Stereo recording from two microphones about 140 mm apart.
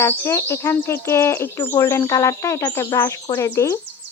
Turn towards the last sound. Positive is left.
turn(degrees=20)  # may be behind; listen again after turning